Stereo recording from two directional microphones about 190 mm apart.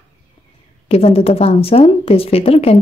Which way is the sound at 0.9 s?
30° left (ahead or behind).